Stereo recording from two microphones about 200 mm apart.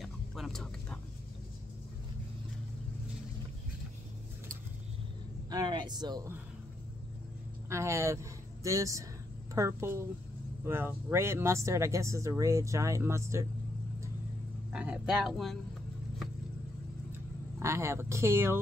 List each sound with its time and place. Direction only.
0.0 s whispering: centre (ahead or behind)
5.5 s speech: 20° right (ahead or behind)
7.7 s speech: 15° right (ahead or behind)
14.7 s speech: 5° right (ahead or behind)
17.6 s speech: 15° right (ahead or behind)